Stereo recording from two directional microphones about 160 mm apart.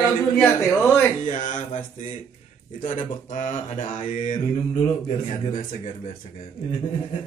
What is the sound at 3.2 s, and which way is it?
Mantra, 50° left (ahead or behind).